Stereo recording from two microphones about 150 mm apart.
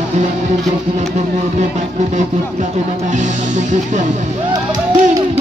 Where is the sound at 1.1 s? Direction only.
50° right (ahead or behind).